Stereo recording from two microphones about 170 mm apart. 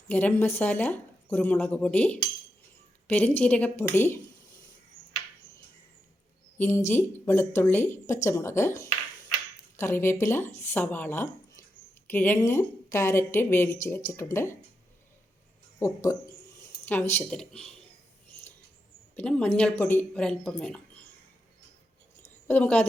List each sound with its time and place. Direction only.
0.1 s speech: 10° left (ahead or behind)
6.6 s speech: 10° left (ahead or behind)
15.8 s speech: 15° left (ahead or behind)
19.1 s speech: 5° left (ahead or behind)
22.2 s a sound: 10° left (ahead or behind)